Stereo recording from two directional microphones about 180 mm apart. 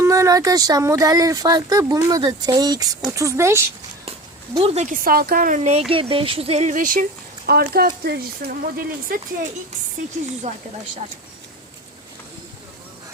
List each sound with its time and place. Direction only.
0.0 s speech: 15° right (ahead or behind)
4.5 s speech: 35° right (ahead or behind); by 9.1 s 55° right (ahead or behind)